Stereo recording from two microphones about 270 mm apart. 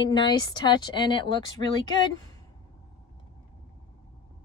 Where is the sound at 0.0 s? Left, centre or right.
Centre.